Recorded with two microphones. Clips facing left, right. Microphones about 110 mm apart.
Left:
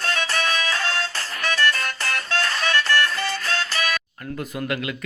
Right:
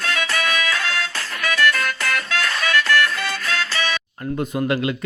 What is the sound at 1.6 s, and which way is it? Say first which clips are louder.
Music: right 6 dB; 40° left (ahead or behind).